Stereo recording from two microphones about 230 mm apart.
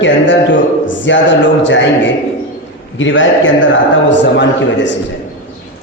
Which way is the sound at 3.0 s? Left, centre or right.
Left.